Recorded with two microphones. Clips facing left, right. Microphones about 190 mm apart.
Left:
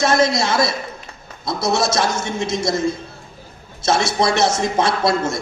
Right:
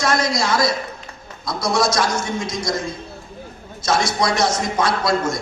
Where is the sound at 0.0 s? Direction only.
25° left (ahead or behind).